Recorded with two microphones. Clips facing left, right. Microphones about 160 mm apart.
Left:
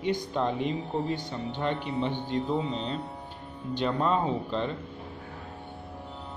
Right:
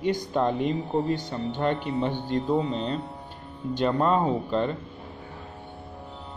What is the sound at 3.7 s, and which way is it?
Speech, 45° right (ahead or behind).